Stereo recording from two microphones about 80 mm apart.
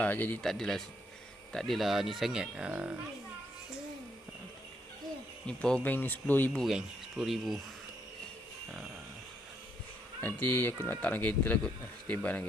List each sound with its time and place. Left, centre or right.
0.0 s speech: left
0.4 s speech: centre
5.5 s speech: centre
5.8 s speech: left
6.5 s speech: centre
10.2 s speech: left